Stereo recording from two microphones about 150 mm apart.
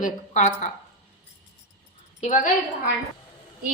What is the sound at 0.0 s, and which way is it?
Speech, 55° left (ahead or behind).